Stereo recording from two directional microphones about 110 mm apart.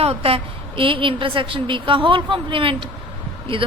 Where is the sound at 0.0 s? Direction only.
65° right (ahead or behind).